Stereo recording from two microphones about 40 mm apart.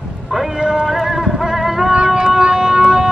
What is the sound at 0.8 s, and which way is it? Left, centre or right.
Music, centre.